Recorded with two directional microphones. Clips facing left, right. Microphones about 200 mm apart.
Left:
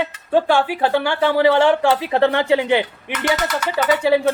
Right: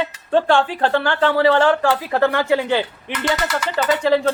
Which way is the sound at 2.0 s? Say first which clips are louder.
Left 1 dB; 25° left (ahead or behind).